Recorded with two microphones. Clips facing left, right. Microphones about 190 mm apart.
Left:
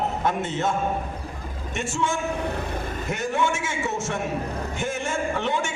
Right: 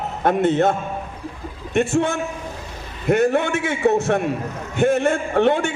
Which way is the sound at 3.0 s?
60° right (ahead or behind).